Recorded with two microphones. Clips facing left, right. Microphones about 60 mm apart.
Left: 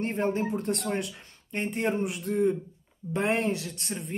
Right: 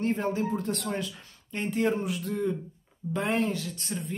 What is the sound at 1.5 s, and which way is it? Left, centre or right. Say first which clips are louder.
A woman's voice: right 1 dB; left.